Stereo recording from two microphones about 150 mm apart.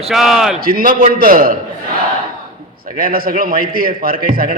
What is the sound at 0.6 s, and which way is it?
Speech, 70° right (ahead or behind).